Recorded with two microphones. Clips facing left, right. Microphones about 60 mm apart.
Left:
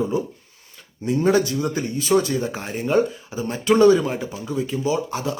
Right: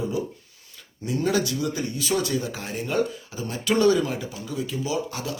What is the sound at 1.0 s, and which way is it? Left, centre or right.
Speech, left.